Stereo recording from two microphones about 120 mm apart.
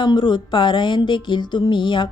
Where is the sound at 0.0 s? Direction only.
40° left (ahead or behind).